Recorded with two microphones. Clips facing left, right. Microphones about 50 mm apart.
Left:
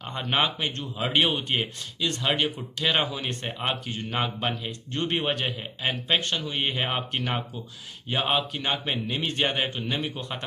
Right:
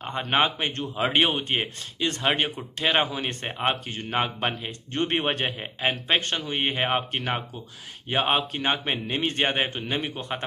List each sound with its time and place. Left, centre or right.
0.0 s speech: right
0.3 s speech: right
0.7 s speech: right; by 7.6 s centre
8.1 s speech: right